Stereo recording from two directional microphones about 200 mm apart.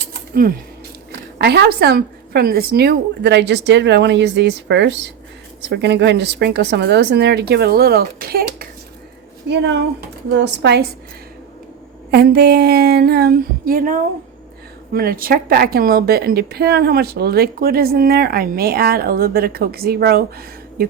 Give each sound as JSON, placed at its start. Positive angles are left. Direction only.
{"t": 1.4, "sound": "a woman's voice", "side_deg": -55}
{"t": 9.5, "sound": "a woman's voice", "side_deg": -60}
{"t": 12.1, "sound": "a woman's voice", "side_deg": -55}